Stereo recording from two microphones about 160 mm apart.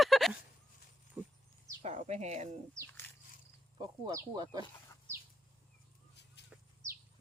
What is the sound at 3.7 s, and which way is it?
Speech, 25° right (ahead or behind).